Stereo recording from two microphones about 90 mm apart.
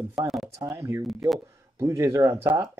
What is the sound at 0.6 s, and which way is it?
Speech, 30° right (ahead or behind).